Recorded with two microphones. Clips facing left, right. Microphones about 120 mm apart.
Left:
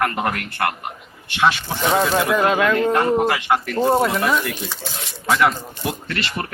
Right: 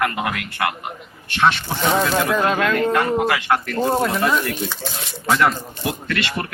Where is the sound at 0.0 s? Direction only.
45° left (ahead or behind).